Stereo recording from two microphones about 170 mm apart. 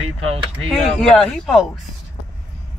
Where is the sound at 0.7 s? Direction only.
5° left (ahead or behind).